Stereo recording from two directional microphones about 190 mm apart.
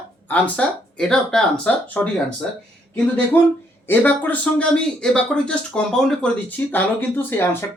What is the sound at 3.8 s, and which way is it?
Speech, 10° left (ahead or behind).